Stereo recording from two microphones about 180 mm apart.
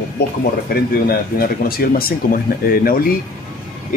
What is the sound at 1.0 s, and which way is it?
Speech, 55° left (ahead or behind).